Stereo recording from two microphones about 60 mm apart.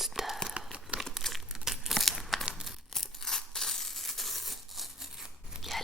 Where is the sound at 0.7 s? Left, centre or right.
Centre.